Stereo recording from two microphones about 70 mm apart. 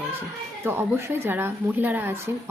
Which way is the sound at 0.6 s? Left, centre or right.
Right.